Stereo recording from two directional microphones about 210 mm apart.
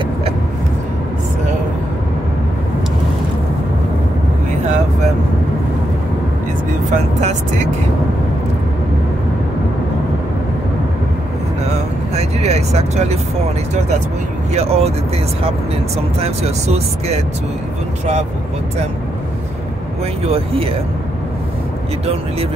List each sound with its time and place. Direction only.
6.9 s vehicle: 30° right (ahead or behind)
12.2 s vehicle: 30° right (ahead or behind)
14.5 s speech: 30° right (ahead or behind)
16.2 s speech: 30° right (ahead or behind)
20.2 s speech: 25° right (ahead or behind)